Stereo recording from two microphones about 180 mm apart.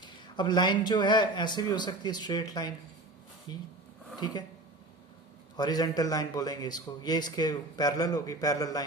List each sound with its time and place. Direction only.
0.0 s speech: 25° left (ahead or behind)
5.5 s speech: 20° left (ahead or behind)